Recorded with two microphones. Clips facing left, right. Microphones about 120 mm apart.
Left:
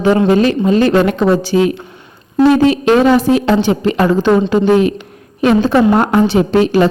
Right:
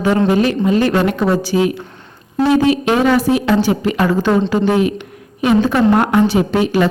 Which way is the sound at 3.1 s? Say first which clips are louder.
Left 3 dB; 25° left (ahead or behind).